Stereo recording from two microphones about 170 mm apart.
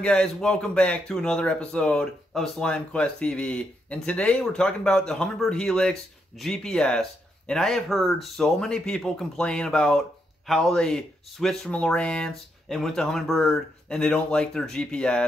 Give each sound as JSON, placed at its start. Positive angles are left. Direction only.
{"t": 0.0, "sound": "speech", "side_deg": 5}